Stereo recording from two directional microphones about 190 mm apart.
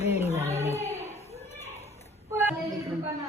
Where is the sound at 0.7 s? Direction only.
35° left (ahead or behind).